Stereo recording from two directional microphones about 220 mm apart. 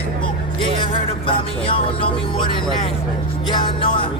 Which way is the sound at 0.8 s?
25° left (ahead or behind).